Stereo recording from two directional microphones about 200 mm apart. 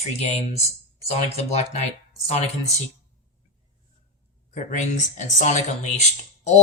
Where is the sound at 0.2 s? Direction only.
30° left (ahead or behind).